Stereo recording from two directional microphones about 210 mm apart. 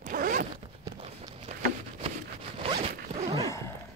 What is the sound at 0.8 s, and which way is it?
Run, 20° right (ahead or behind).